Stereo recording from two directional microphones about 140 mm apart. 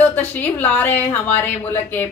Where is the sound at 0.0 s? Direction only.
15° left (ahead or behind).